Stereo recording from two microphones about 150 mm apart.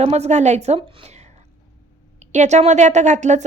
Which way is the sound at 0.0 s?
45° right (ahead or behind).